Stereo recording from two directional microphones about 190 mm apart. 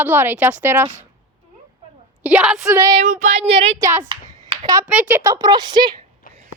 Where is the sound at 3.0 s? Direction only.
40° right (ahead or behind).